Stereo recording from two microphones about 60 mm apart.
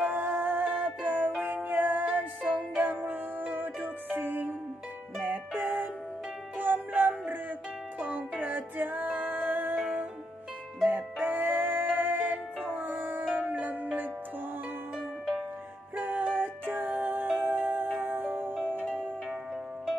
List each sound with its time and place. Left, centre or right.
0.0 s music: right
16.0 s music: right
18.7 s music: centre